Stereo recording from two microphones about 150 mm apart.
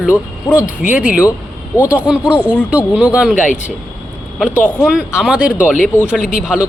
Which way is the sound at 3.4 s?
55° left (ahead or behind).